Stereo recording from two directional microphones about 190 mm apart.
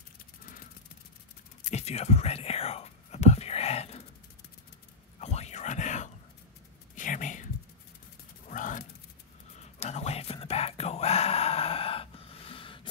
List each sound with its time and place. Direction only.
1.6 s whispering: 35° left (ahead or behind)
5.2 s whispering: 35° left (ahead or behind)
8.5 s a sound: 45° left (ahead or behind); by 12.8 s 25° left (ahead or behind)